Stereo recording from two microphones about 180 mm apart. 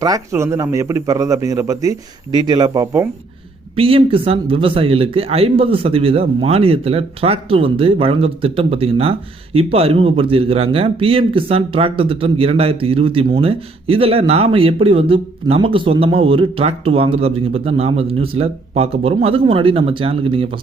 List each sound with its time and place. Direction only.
0.0 s a man's voice: 15° right (ahead or behind)